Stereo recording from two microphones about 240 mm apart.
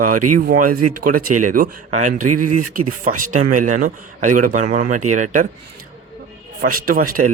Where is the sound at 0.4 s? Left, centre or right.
Right.